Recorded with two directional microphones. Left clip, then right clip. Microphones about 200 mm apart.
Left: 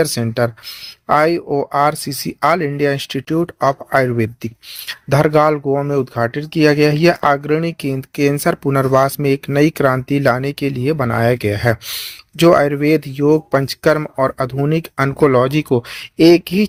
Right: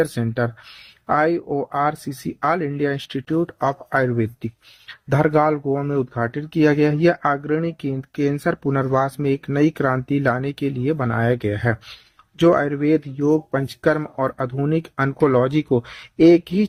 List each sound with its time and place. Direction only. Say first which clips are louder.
0.0 s speech: left 5 dB; 25° left (ahead or behind)